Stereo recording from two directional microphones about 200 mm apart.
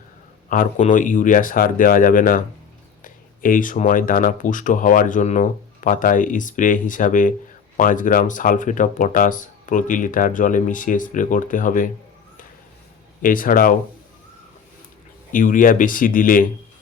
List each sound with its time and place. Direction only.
0.4 s speech: 45° left (ahead or behind)
13.2 s speech: 45° left (ahead or behind)
15.3 s speech: 40° left (ahead or behind)